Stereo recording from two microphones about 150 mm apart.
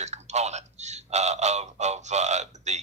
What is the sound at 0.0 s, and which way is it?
Speech, 50° right (ahead or behind).